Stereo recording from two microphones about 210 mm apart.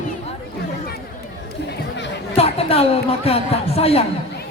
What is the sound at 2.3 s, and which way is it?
Speech, 30° left (ahead or behind).